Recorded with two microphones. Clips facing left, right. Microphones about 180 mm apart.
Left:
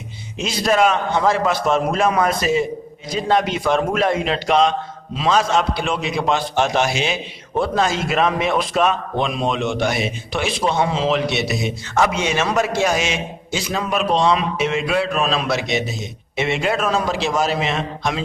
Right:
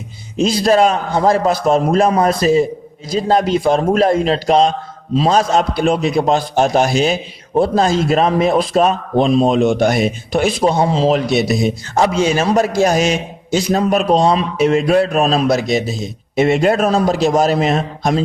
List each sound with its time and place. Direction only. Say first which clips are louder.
0.3 s a man's voice: right 5 dB; 35° right (ahead or behind)